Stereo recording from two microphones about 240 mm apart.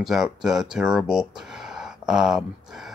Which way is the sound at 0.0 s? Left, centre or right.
Centre.